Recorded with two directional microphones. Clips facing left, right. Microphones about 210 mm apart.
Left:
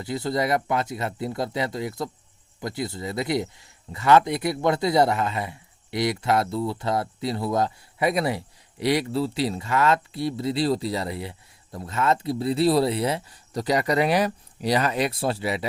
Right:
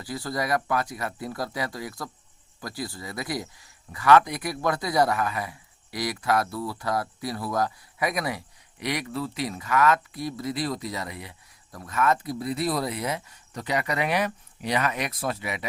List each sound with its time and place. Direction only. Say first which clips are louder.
0.0 s speech: left 5 dB; 25° left (ahead or behind)